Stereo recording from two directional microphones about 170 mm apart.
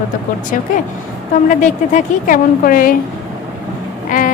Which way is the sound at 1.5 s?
50° left (ahead or behind).